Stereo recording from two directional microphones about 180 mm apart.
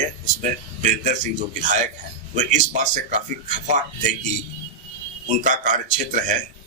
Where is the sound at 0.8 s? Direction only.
45° right (ahead or behind).